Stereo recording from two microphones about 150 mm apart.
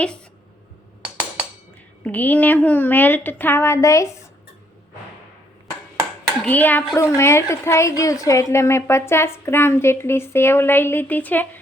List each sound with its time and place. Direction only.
1.1 s a sound: 10° right (ahead or behind)
2.0 s a woman's voice: 10° left (ahead or behind)
6.4 s a woman's voice: 10° left (ahead or behind)